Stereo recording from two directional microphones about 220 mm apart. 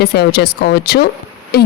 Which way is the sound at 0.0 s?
45° left (ahead or behind).